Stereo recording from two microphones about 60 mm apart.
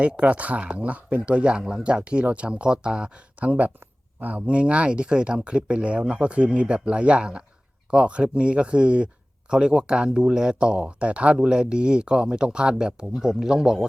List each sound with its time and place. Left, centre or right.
0.0 s speech: centre